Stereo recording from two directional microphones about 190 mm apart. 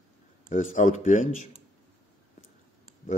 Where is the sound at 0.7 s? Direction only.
40° left (ahead or behind).